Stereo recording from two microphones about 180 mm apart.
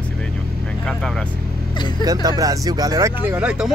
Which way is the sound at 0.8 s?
Centre (ahead or behind).